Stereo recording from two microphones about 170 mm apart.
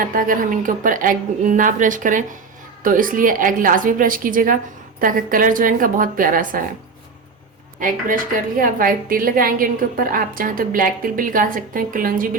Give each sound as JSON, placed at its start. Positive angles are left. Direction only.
{"t": 0.0, "sound": "a woman's voice", "side_deg": -55}
{"t": 7.8, "sound": "a woman's voice", "side_deg": -55}